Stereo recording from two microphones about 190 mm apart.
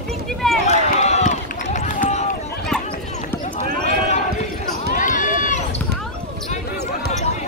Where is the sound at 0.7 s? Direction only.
35° left (ahead or behind).